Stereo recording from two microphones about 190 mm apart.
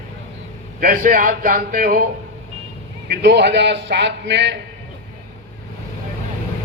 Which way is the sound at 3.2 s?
65° right (ahead or behind).